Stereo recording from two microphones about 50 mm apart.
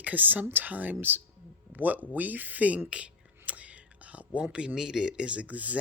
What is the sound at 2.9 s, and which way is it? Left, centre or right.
Whispering, right.